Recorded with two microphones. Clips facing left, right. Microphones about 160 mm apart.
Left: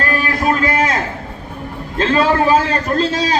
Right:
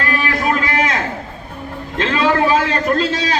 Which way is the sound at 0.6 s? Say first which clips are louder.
Left 3 dB; 45° left (ahead or behind).